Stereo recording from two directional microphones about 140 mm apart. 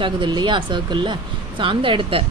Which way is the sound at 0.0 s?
35° right (ahead or behind).